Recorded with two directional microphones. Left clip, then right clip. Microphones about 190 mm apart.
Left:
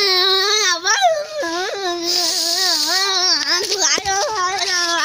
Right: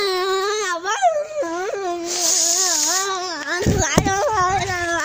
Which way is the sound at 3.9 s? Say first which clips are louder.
Right 2 dB; 45° right (ahead or behind).